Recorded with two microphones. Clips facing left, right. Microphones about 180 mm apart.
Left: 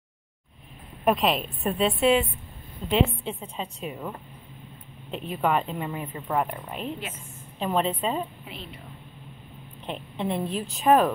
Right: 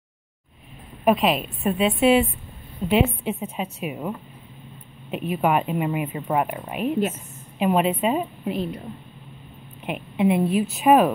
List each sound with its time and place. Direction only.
1.0 s a woman's voice: centre (ahead or behind)
5.1 s speech: 10° right (ahead or behind)
8.5 s a woman's voice: 45° right (ahead or behind)
9.8 s speech: 10° right (ahead or behind)